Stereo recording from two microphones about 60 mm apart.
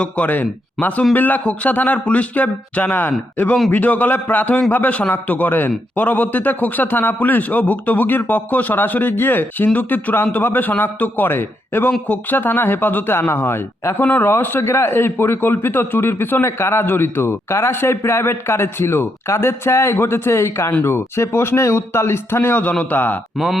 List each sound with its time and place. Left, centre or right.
0.0 s a man's voice: left
14.0 s speech: left
14.3 s a man's voice: left